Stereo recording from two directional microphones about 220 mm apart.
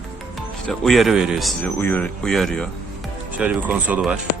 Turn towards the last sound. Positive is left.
turn(degrees=-5)  # may be behind; listen again after turning